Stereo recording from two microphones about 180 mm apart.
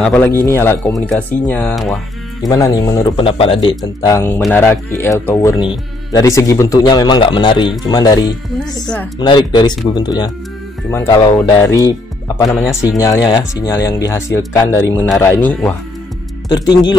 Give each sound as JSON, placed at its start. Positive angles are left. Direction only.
{"t": 0.0, "sound": "speech", "side_deg": 5}
{"t": 2.4, "sound": "speech", "side_deg": 20}
{"t": 3.6, "sound": "speech", "side_deg": 20}
{"t": 10.9, "sound": "speech", "side_deg": 15}
{"t": 11.2, "sound": "speech", "side_deg": 25}
{"t": 11.6, "sound": "speech", "side_deg": 15}
{"t": 12.4, "sound": "a man's voice", "side_deg": 0}
{"t": 12.8, "sound": "speech", "side_deg": 20}